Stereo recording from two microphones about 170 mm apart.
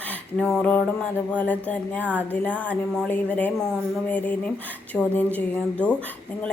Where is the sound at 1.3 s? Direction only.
10° left (ahead or behind).